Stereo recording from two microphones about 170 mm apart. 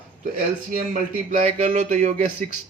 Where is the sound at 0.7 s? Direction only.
50° right (ahead or behind).